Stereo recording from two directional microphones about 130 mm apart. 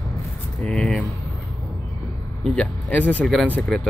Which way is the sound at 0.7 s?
5° left (ahead or behind).